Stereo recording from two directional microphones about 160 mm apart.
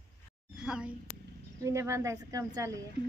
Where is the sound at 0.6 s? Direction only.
5° right (ahead or behind).